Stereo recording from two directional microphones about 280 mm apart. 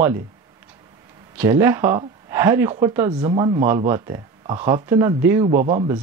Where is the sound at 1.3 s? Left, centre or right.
Centre.